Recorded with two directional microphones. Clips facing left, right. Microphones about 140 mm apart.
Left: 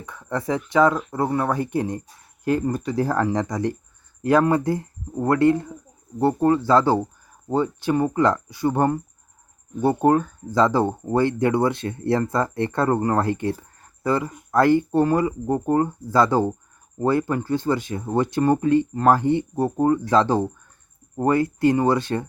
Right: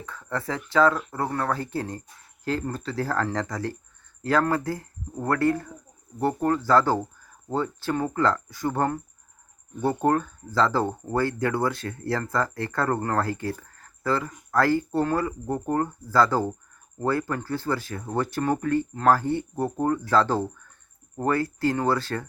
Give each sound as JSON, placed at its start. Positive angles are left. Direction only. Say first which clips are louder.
{"t": 0.0, "sound": "speech", "louder": "left 4 dB", "side_deg": 20}
{"t": 10.0, "sound": "speech", "louder": "left 5 dB", "side_deg": 15}